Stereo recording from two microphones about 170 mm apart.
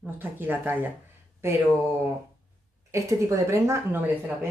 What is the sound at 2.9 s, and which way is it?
Speech, 20° right (ahead or behind).